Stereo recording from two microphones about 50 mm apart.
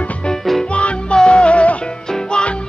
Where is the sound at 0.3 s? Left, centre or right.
Centre.